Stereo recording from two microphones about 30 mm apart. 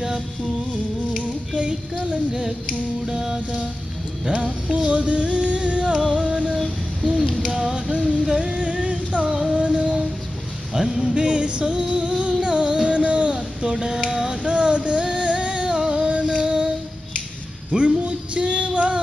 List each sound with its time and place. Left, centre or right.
1.1 s child singing: right
3.1 s music: centre
4.3 s music: right
7.9 s music: right
8.4 s a sound: right
9.5 s female singing: right
10.7 s a sound: right
11.1 s music: right
13.7 s a sound: right
14.1 s music: right
17.6 s female singing: right